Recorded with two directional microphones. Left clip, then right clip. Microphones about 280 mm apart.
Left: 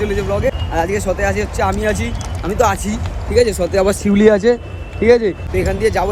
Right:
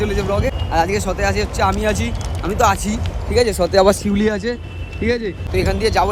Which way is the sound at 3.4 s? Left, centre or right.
Right.